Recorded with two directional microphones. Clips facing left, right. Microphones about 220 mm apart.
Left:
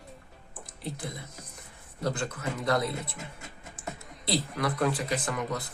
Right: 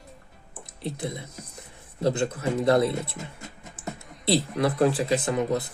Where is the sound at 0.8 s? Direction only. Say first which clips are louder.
Right 6 dB; 25° right (ahead or behind).